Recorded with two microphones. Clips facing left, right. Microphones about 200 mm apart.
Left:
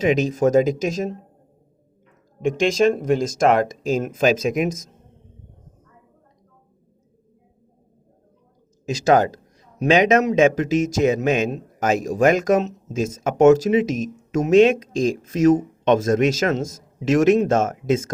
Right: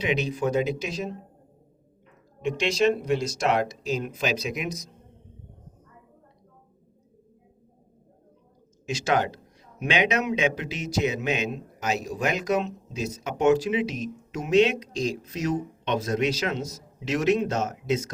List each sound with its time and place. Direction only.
0.0 s a man's voice: 45° left (ahead or behind)
2.4 s a man's voice: 50° left (ahead or behind)
8.9 s a man's voice: 40° left (ahead or behind)